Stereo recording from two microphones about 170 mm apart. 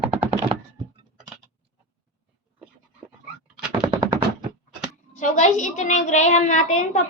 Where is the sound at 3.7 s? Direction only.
30° right (ahead or behind).